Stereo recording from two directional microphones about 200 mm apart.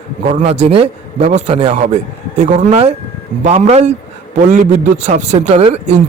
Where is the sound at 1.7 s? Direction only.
35° right (ahead or behind).